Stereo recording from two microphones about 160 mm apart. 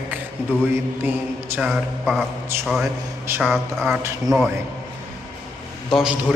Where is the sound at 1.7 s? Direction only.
Centre (ahead or behind).